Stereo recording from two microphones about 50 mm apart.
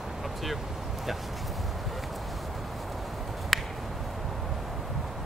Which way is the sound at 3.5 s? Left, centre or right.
Centre.